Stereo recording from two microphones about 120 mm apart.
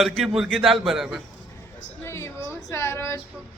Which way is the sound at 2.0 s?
25° left (ahead or behind).